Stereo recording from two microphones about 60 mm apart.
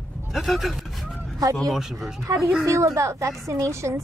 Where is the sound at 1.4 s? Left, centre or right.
Right.